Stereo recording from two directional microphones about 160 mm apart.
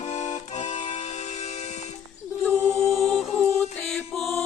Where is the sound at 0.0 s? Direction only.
50° left (ahead or behind).